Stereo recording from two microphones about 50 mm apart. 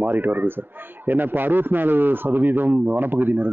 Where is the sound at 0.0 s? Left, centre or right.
Right.